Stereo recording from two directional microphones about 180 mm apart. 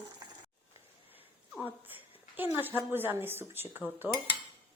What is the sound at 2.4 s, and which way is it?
A woman's voice, 10° right (ahead or behind).